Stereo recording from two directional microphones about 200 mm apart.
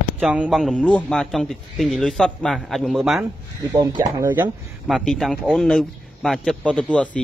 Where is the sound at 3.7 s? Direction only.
20° right (ahead or behind).